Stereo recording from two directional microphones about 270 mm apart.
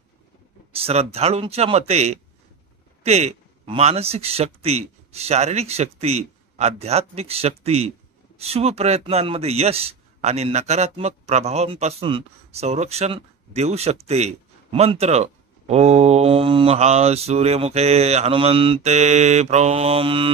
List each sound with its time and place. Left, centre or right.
0.7 s a man's voice: right